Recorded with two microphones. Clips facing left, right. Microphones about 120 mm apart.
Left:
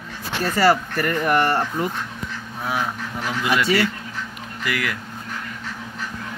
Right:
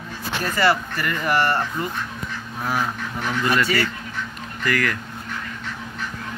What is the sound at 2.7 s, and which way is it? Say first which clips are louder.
Speech: even; 5° left (ahead or behind).